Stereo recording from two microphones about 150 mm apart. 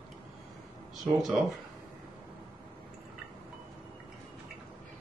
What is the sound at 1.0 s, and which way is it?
Speech, centre (ahead or behind).